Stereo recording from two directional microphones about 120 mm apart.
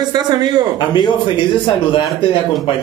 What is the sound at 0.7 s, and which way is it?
A man's voice, 40° left (ahead or behind).